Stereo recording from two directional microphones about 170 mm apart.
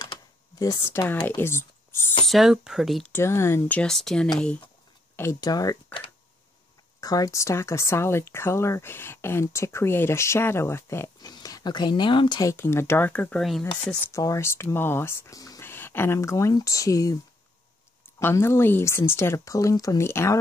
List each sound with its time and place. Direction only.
0.0 s typing: 25° left (ahead or behind)
2.2 s speech: centre (ahead or behind)
3.1 s speech: 15° left (ahead or behind)
5.1 s speech: 20° left (ahead or behind)
7.0 s speech: 20° left (ahead or behind); by 13.7 s centre (ahead or behind)
14.1 s speech: 20° left (ahead or behind)
18.2 s speech: 15° left (ahead or behind)